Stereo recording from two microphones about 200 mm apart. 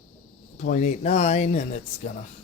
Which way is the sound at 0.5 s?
40° left (ahead or behind).